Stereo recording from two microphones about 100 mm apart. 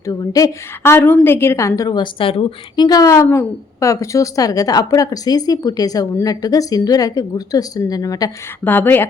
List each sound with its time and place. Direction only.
0.0 s a woman's voice: 35° left (ahead or behind)
2.0 s speech: 60° left (ahead or behind)
2.7 s a woman's voice: 40° left (ahead or behind)
8.6 s a woman's voice: 20° left (ahead or behind)